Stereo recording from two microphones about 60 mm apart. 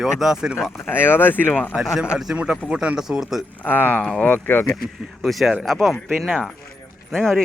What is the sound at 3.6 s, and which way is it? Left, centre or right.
Speech, left.